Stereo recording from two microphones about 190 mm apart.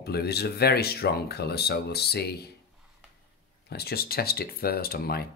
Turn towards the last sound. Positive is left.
turn(degrees=55)  # may be behind; listen again after turning